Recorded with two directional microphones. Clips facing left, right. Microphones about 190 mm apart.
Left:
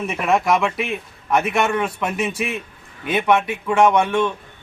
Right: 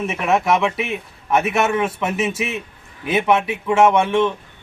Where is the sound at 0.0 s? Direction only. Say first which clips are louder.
Even; centre (ahead or behind).